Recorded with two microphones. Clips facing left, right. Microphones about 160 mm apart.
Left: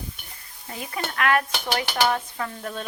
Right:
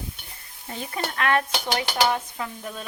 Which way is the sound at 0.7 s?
30° right (ahead or behind).